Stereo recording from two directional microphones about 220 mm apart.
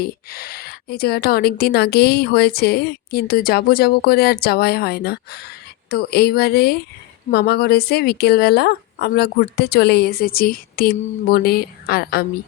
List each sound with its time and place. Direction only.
0.0 s a woman's voice: 45° left (ahead or behind)